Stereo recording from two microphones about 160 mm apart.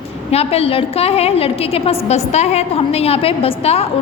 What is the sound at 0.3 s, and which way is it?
A woman's voice, 40° left (ahead or behind).